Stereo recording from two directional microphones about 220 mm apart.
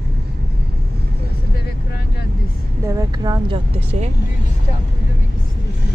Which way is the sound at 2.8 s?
15° right (ahead or behind).